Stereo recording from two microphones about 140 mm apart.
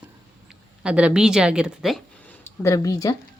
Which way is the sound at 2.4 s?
20° left (ahead or behind).